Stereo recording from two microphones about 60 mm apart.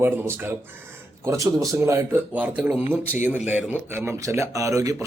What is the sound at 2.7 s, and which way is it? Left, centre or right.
Speech, right.